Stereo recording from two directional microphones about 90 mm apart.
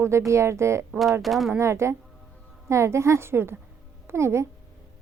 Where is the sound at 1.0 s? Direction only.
Centre (ahead or behind).